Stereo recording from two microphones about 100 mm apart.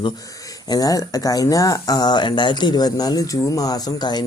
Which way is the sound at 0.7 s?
40° left (ahead or behind).